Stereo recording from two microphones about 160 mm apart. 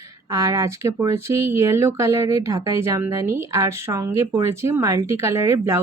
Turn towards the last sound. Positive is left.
turn(degrees=-20)  # may be behind; listen again after turning